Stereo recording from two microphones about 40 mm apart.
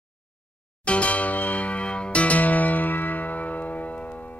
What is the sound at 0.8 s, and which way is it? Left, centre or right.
Music, left.